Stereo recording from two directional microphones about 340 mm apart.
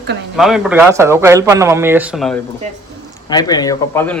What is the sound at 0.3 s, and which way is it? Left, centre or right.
A man's voice, centre.